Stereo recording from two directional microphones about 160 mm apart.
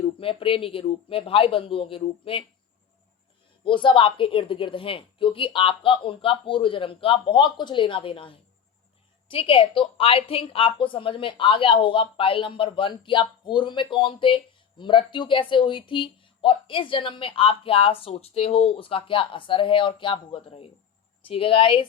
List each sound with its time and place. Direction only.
0.2 s a woman's voice: 35° left (ahead or behind)
3.6 s a woman's voice: 30° left (ahead or behind)